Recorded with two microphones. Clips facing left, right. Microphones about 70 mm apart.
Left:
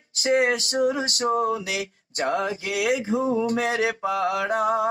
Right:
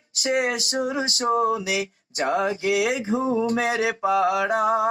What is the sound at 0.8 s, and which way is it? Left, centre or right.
Mantra, right.